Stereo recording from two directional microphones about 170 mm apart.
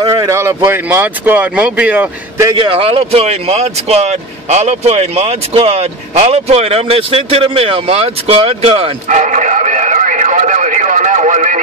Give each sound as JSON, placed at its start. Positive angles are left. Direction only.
{"t": 0.0, "sound": "speech", "side_deg": -25}
{"t": 2.5, "sound": "speech", "side_deg": -30}